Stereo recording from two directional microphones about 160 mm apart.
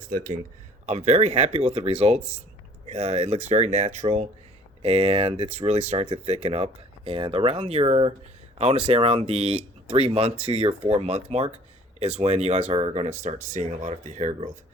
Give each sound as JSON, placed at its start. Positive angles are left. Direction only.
{"t": 0.9, "sound": "speech", "side_deg": -45}